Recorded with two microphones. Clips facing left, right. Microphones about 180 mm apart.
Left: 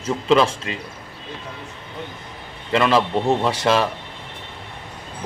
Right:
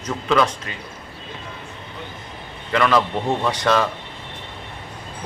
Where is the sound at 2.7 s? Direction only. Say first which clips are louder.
Left 1 dB; 25° left (ahead or behind).